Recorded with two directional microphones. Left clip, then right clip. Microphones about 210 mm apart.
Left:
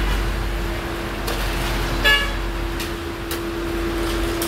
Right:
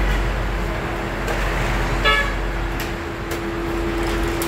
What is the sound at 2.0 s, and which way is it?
Vehicle, 55° left (ahead or behind).